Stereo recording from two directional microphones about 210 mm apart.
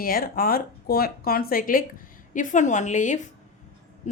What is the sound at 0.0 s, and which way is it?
Speech, 45° left (ahead or behind).